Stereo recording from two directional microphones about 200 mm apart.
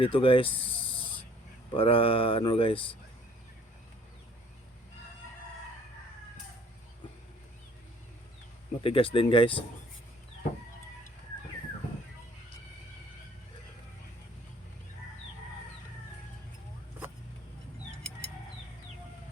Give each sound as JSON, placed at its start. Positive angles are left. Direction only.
{"t": 0.0, "sound": "speech", "side_deg": 25}
{"t": 8.8, "sound": "speech", "side_deg": 25}